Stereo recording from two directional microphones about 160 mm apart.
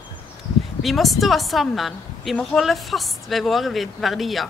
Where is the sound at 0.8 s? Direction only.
Centre (ahead or behind).